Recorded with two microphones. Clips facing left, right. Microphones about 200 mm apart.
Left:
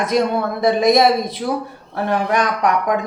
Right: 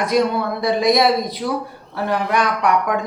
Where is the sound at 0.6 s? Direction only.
50° left (ahead or behind).